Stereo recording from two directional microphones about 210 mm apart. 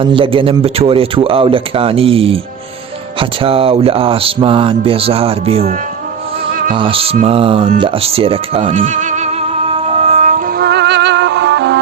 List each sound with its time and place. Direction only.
0.0 s speech: 25° right (ahead or behind)
6.5 s music: 40° right (ahead or behind)
6.7 s speech: 25° right (ahead or behind)
8.7 s music: 35° right (ahead or behind); by 11.8 s 55° right (ahead or behind)